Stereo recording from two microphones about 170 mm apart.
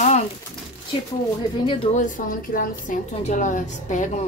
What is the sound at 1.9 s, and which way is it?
A woman's voice, 50° left (ahead or behind).